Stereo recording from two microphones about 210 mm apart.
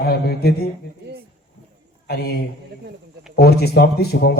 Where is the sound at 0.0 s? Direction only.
50° left (ahead or behind).